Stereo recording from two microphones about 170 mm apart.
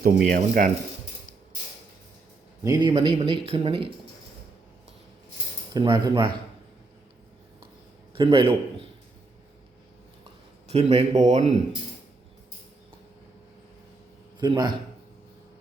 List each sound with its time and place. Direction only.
0.0 s speech: 55° right (ahead or behind)
2.6 s a man's voice: 20° right (ahead or behind)
5.7 s a man's voice: 25° right (ahead or behind)
8.1 s a man's voice: 30° right (ahead or behind)
10.7 s speech: 35° right (ahead or behind)
14.3 s a man's voice: 25° right (ahead or behind)